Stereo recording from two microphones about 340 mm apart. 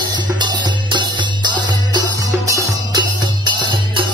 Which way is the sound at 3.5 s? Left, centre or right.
Centre.